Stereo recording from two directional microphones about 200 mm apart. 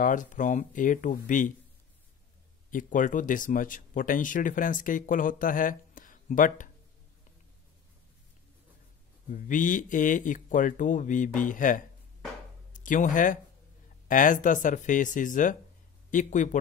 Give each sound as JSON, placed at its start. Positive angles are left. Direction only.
{"t": 0.0, "sound": "speech", "side_deg": 40}
{"t": 2.7, "sound": "speech", "side_deg": 40}
{"t": 9.3, "sound": "speech", "side_deg": 40}